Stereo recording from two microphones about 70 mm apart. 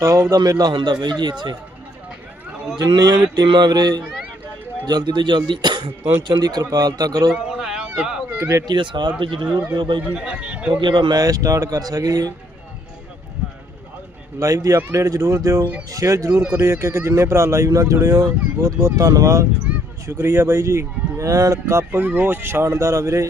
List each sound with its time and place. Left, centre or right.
0.0 s a man's voice: right
2.7 s a man's voice: right
3.3 s mantra: right
4.9 s speech: right
7.3 s a sound: centre
8.4 s speech: right
8.6 s speech: right
10.0 s speech: centre
10.8 s speech: right
11.2 s speech: right
14.3 s speech: right
16.5 s speech: right
22.0 s speech: right
22.7 s speech: right